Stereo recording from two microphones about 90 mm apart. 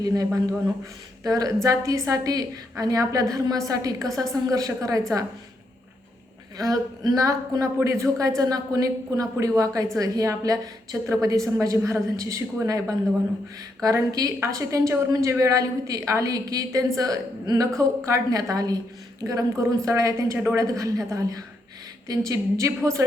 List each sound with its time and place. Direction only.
0.0 s a man's voice: 40° right (ahead or behind)
6.6 s a woman's voice: 45° right (ahead or behind)